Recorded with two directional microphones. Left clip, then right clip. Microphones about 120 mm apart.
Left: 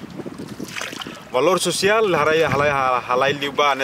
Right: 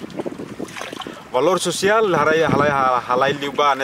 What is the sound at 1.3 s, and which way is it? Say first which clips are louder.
Speech: even; centre (ahead or behind).